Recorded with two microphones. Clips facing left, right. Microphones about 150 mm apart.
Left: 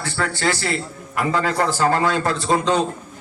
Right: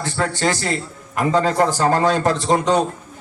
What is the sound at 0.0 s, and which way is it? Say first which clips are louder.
A man's voice: right 2 dB; 20° right (ahead or behind).